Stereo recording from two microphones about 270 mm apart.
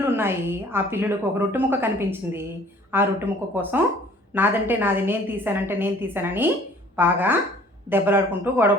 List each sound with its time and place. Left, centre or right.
0.0 s a woman's voice: centre